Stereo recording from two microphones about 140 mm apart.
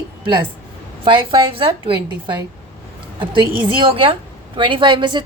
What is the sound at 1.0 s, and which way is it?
A woman's voice, 35° right (ahead or behind).